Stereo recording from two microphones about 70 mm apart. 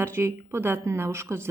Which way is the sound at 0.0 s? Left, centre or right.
Right.